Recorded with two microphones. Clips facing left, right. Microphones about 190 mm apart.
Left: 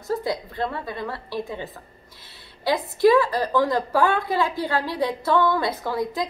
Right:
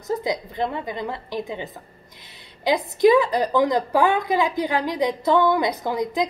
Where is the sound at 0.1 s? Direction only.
20° right (ahead or behind).